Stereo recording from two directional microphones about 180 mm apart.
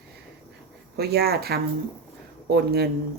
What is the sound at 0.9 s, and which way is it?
A woman's voice, 65° right (ahead or behind).